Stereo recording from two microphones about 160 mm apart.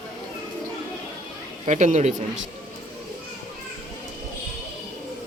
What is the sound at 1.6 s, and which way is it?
Speech, 50° right (ahead or behind).